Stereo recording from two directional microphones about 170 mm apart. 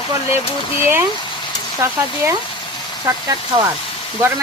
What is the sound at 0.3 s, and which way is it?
Speech, 30° left (ahead or behind).